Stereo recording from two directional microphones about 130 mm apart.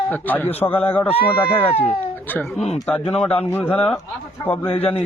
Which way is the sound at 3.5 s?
10° left (ahead or behind).